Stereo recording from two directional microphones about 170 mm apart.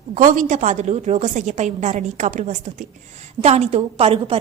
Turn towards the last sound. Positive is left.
turn(degrees=-35)  # may be behind; listen again after turning